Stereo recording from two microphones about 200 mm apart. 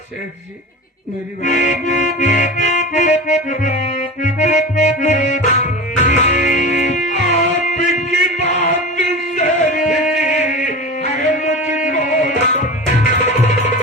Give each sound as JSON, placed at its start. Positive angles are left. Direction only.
{"t": 1.5, "sound": "music", "side_deg": 35}